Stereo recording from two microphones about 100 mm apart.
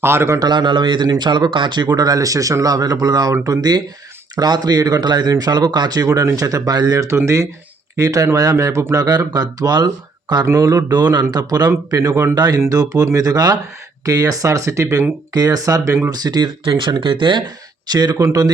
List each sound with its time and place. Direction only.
0.0 s a man's voice: 25° right (ahead or behind)
0.3 s speech: 45° right (ahead or behind)
7.1 s a man's voice: 30° right (ahead or behind); by 10.4 s 45° right (ahead or behind)
10.4 s speech: 35° right (ahead or behind)
12.3 s speech: 40° right (ahead or behind)
15.3 s speech: 40° right (ahead or behind)
16.2 s speech: 45° right (ahead or behind)
17.9 s speech: 40° right (ahead or behind)